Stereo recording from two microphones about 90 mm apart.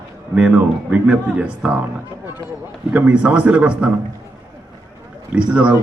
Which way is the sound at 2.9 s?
10° right (ahead or behind).